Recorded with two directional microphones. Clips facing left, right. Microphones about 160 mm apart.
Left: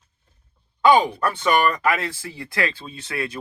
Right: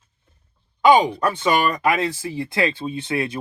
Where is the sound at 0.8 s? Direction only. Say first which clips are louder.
Right 2 dB; 20° right (ahead or behind).